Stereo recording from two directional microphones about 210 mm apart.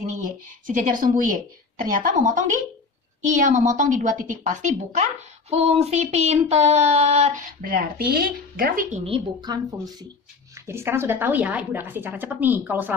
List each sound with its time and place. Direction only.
0.0 s a woman's voice: 35° right (ahead or behind)
7.6 s speech: 45° right (ahead or behind)
9.0 s a woman's voice: 20° right (ahead or behind)